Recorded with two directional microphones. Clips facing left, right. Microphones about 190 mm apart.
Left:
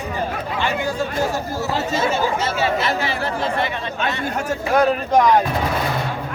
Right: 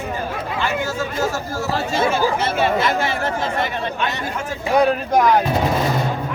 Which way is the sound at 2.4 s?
55° right (ahead or behind).